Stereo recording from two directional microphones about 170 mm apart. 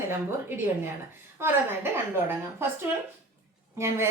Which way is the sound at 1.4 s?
15° right (ahead or behind).